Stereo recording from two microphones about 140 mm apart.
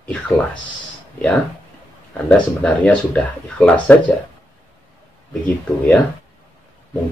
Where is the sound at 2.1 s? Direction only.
10° left (ahead or behind).